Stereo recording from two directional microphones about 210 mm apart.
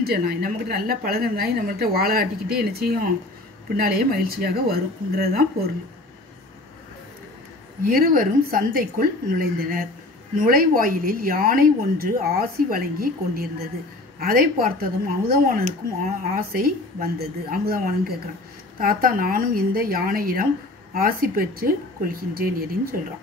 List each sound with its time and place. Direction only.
0.0 s speech: 45° right (ahead or behind)
7.8 s speech: 40° right (ahead or behind)